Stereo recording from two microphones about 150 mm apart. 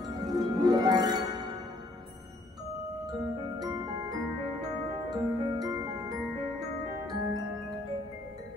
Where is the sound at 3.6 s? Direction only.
25° right (ahead or behind).